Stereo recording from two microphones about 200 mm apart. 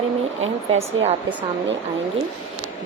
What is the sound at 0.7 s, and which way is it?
Speech, 30° right (ahead or behind).